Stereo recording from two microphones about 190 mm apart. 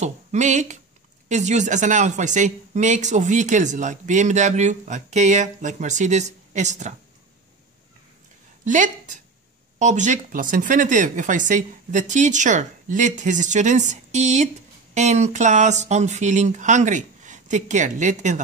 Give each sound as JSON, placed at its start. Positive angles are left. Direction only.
{"t": 0.0, "sound": "speech", "side_deg": -40}
{"t": 8.6, "sound": "a woman's voice", "side_deg": -40}